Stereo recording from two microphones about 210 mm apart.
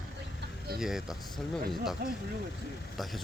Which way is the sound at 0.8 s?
Centre (ahead or behind).